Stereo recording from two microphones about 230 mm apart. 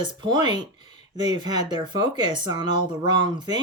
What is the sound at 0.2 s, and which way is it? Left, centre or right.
Speech, centre.